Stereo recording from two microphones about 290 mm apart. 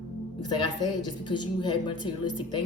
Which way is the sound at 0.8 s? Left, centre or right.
Centre.